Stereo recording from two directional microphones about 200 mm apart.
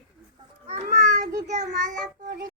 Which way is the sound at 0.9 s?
40° right (ahead or behind).